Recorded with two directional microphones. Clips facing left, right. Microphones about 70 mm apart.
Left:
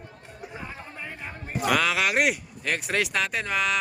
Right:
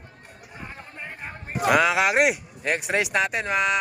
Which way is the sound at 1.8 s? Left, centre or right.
Centre.